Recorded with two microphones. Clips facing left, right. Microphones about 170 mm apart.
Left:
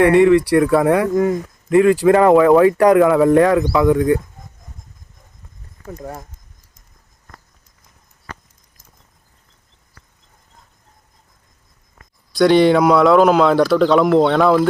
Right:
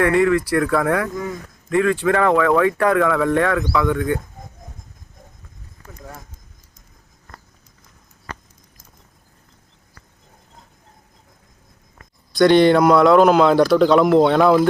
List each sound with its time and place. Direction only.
0.0 s speech: 25° left (ahead or behind)
1.1 s speech: 50° left (ahead or behind)
1.7 s speech: 30° left (ahead or behind)
2.9 s speech: 25° left (ahead or behind)
6.0 s speech: 40° left (ahead or behind)
12.3 s speech: 5° left (ahead or behind)